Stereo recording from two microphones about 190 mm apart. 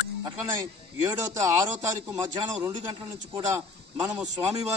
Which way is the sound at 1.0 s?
15° right (ahead or behind).